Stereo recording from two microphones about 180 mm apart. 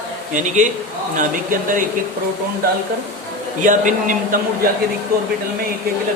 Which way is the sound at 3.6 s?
45° right (ahead or behind).